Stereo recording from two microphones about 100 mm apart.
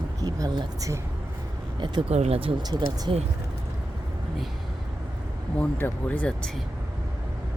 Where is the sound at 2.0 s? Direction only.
85° right.